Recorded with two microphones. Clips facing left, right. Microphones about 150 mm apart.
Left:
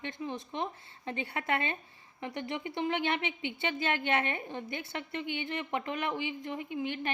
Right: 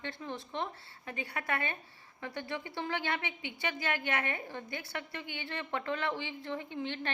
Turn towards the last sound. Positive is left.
turn(degrees=10)  # may be behind; listen again after turning